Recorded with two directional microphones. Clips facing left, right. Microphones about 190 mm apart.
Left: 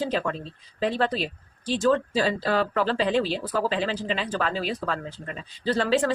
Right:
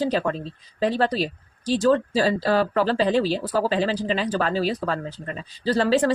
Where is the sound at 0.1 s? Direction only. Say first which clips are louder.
Right 3 dB; 40° right (ahead or behind).